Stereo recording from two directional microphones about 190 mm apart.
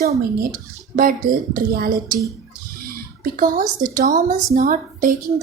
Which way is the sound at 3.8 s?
45° right (ahead or behind).